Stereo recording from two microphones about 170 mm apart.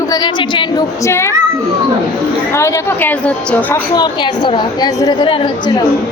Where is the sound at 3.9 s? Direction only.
25° left (ahead or behind).